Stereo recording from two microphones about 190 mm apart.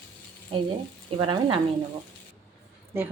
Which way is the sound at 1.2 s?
25° right (ahead or behind).